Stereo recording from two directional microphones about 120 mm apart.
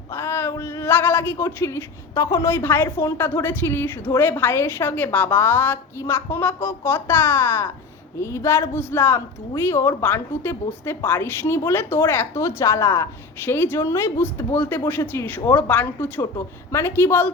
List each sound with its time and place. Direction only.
0.1 s speech: 20° left (ahead or behind)